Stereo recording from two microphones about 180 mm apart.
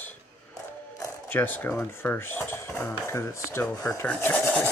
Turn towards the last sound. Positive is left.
turn(degrees=10)  # may be behind; listen again after turning